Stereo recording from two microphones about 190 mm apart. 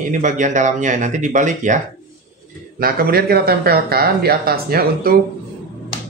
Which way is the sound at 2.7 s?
50° right (ahead or behind).